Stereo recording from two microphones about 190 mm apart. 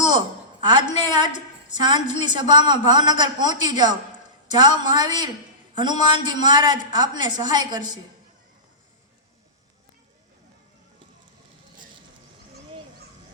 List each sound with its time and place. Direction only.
0.6 s a woman's voice: 20° right (ahead or behind)